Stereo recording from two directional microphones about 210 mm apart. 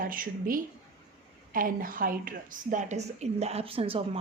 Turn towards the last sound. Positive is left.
turn(degrees=-25)  # may be behind; listen again after turning